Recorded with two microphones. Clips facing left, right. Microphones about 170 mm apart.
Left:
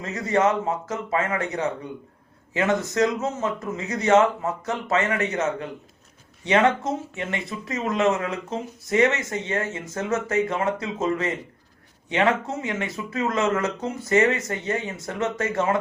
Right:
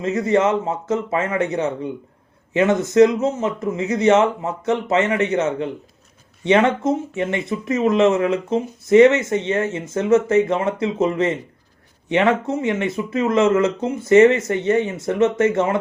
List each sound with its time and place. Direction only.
0.0 s speech: 25° right (ahead or behind)